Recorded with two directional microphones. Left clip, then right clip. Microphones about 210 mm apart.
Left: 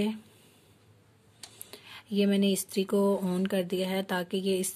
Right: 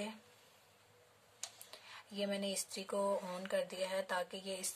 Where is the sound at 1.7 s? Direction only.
35° left (ahead or behind).